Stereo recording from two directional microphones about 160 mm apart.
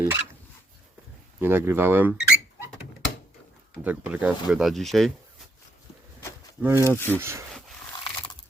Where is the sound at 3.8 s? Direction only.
10° right (ahead or behind).